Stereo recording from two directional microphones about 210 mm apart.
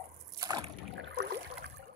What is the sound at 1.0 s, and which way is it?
Boat, 60° right (ahead or behind).